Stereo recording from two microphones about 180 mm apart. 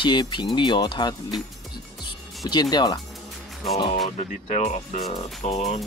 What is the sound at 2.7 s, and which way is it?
Speech, 20° left (ahead or behind).